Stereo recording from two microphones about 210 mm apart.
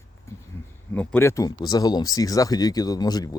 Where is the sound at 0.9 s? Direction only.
10° left (ahead or behind).